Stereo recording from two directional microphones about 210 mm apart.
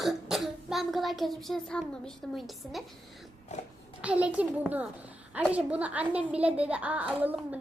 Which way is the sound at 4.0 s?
5° right (ahead or behind).